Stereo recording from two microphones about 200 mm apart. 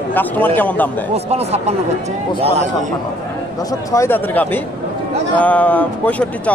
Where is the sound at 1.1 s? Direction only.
30° right (ahead or behind).